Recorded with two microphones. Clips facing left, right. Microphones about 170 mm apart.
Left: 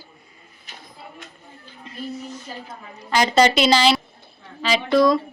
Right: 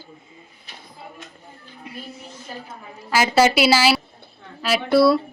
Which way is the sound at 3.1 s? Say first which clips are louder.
Even; 5° right (ahead or behind).